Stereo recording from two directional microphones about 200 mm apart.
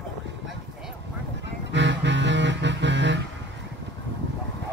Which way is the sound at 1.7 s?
65° right (ahead or behind).